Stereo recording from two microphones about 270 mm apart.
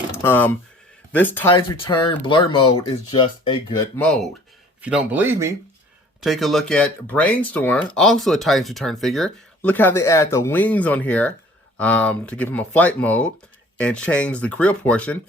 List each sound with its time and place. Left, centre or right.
0.2 s speech: centre
1.5 s speech: centre
3.9 s speech: centre